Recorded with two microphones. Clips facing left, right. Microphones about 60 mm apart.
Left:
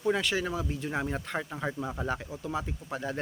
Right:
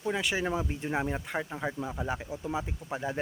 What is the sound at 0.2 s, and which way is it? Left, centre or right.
Speech, centre.